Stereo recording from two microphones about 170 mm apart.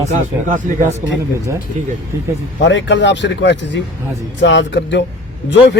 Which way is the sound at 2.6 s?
90° left.